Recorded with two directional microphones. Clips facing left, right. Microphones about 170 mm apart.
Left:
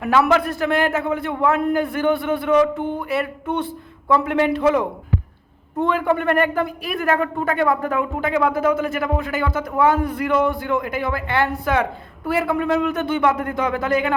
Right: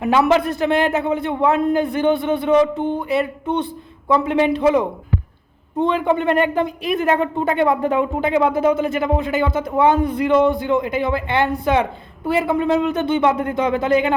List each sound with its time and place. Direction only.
0.0 s a man's voice: 20° right (ahead or behind)
5.8 s a man's voice: 15° right (ahead or behind)